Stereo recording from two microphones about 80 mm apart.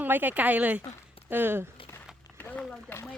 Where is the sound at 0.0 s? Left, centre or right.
Right.